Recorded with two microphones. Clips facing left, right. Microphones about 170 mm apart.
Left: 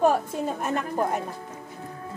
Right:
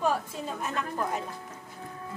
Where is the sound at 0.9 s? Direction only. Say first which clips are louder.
Left 6 dB; 45° left (ahead or behind).